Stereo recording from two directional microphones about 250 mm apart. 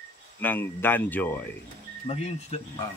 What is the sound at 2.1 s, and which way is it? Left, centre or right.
Speech, left.